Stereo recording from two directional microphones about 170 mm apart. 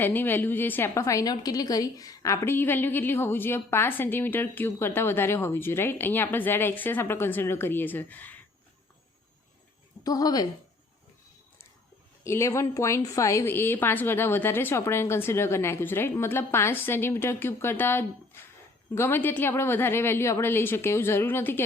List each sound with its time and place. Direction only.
0.0 s a woman's voice: 10° left (ahead or behind)
10.0 s speech: 20° left (ahead or behind)
12.2 s a woman's voice: 15° left (ahead or behind)